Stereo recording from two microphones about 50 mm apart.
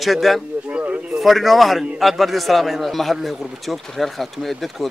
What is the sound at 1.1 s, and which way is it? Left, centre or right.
Speech, centre.